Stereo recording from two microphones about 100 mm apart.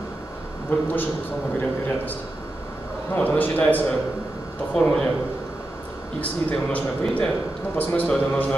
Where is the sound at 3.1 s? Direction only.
15° left (ahead or behind).